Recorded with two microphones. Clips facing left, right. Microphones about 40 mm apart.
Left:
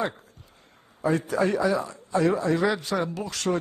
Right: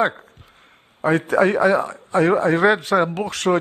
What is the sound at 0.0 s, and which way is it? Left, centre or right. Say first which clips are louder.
A man's voice: right 9 dB; right.